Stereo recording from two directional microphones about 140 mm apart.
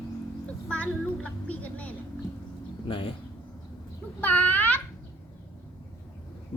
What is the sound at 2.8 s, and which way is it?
Speech, 40° left (ahead or behind).